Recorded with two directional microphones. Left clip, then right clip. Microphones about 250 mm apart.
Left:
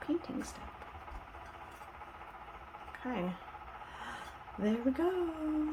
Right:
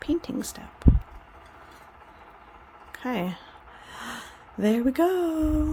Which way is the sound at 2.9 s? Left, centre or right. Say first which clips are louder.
Right 9 dB; right.